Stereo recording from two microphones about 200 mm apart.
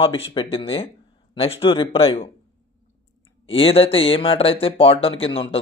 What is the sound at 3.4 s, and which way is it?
A man's voice, 30° left (ahead or behind).